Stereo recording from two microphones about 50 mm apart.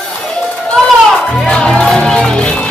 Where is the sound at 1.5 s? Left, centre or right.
Centre.